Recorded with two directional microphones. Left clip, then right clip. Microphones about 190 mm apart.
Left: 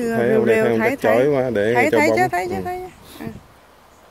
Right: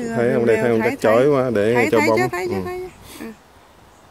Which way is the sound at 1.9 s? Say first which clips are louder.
Left 1 dB; 15° left (ahead or behind).